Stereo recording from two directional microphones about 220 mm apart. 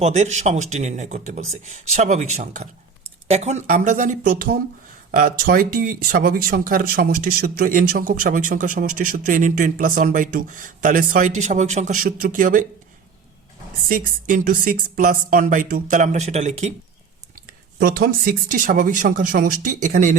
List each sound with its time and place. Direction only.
0.0 s speech: 30° right (ahead or behind)
13.8 s speech: 40° right (ahead or behind)
17.7 s speech: 40° right (ahead or behind)